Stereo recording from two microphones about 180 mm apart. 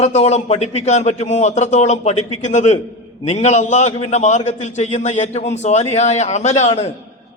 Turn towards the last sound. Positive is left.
turn(degrees=35)  # may be behind; listen again after turning